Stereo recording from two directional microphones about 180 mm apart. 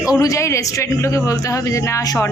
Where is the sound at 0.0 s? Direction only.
20° left (ahead or behind).